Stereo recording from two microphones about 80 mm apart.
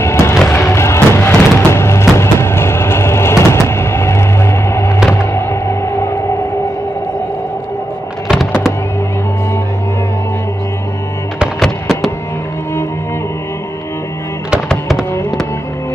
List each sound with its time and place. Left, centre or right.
0.0 s music: left
2.3 s a sound: left
5.1 s music: left
11.6 s music: centre